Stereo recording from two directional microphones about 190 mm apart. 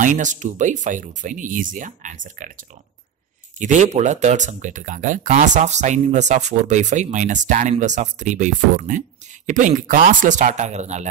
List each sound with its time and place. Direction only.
0.0 s speech: 40° right (ahead or behind)